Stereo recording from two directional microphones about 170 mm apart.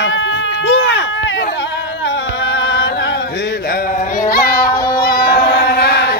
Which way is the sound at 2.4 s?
90° left.